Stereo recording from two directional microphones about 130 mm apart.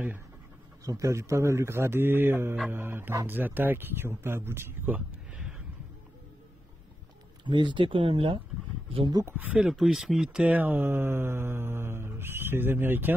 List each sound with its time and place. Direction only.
0.8 s a man's voice: 25° right (ahead or behind); by 5.6 s 5° right (ahead or behind)
7.4 s speech: 35° right (ahead or behind)
9.1 s speech: 20° right (ahead or behind)